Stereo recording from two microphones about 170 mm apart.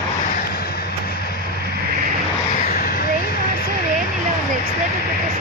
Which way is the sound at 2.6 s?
60° left (ahead or behind).